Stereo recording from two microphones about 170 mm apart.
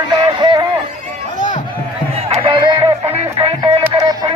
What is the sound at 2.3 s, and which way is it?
Music, 30° right (ahead or behind).